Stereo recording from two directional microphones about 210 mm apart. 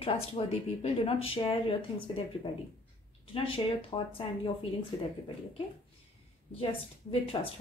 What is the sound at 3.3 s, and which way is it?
A woman's voice, 25° left (ahead or behind).